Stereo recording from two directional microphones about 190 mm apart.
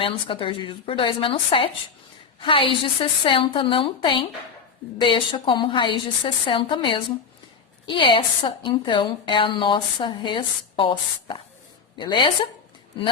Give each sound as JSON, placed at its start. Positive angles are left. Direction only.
{"t": 0.0, "sound": "a woman's voice", "side_deg": 25}